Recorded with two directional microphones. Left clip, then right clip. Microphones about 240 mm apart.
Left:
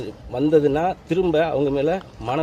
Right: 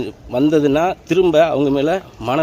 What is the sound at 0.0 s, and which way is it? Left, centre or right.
A man's voice, right.